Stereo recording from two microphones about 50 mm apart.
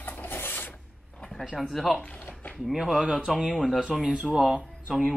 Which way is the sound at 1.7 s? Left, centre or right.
Centre.